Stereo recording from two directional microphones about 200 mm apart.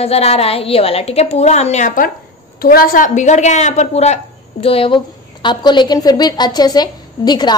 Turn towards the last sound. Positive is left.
turn(degrees=20)  # may be behind; listen again after turning